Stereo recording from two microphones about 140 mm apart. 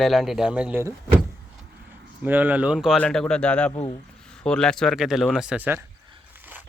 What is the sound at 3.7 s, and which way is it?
Speech, 45° left (ahead or behind).